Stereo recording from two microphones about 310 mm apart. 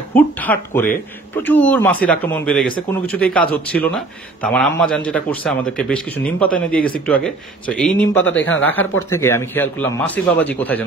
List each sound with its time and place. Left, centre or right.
0.1 s a man's voice: centre
8.2 s speech: left
9.1 s a man's voice: centre